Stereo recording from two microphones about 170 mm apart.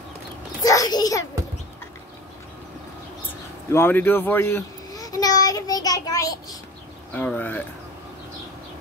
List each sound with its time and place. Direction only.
0.6 s a sound: 20° left (ahead or behind)
3.7 s a child's voice: 15° left (ahead or behind)
7.2 s speech: 10° left (ahead or behind)